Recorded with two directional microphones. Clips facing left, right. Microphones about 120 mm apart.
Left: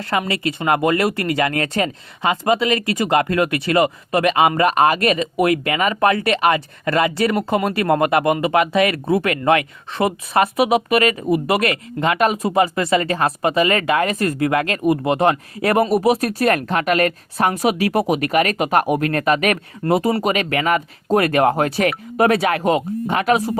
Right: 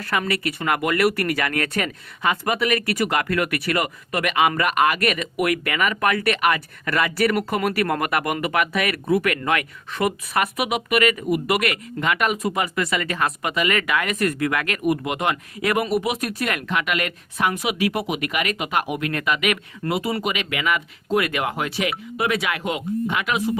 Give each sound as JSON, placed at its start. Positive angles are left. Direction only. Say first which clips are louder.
{"t": 0.0, "sound": "speech", "louder": "left 3 dB", "side_deg": 25}